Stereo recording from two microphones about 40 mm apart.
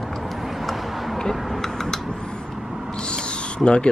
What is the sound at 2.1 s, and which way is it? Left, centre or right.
Vehicle, centre.